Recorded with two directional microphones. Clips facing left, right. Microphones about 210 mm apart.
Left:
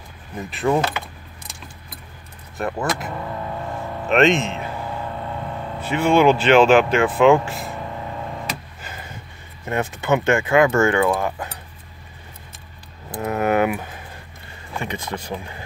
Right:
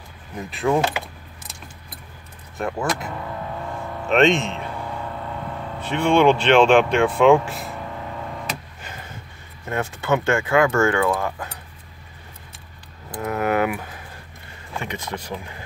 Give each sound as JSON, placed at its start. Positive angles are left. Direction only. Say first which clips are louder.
{"t": 0.5, "sound": "speech", "louder": "left 1 dB", "side_deg": 0}
{"t": 2.6, "sound": "speech", "louder": "left 1 dB", "side_deg": 0}
{"t": 4.1, "sound": "speech", "louder": "left 1 dB", "side_deg": 0}
{"t": 5.8, "sound": "speech", "louder": "left 1 dB", "side_deg": 5}
{"t": 9.7, "sound": "speech", "louder": "left 2 dB", "side_deg": 20}
{"t": 13.1, "sound": "mechanisms", "louder": "left 2 dB", "side_deg": 20}
{"t": 14.9, "sound": "speech", "louder": "left 2 dB", "side_deg": 30}